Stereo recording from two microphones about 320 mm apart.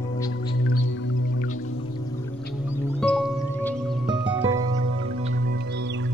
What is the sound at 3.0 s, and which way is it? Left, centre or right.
Music, centre.